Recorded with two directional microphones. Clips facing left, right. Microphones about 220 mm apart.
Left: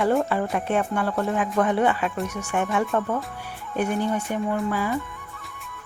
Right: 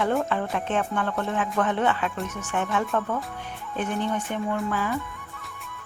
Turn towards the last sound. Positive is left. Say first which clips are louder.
# left 2 dB
turn(degrees=10)  # may be behind; listen again after turning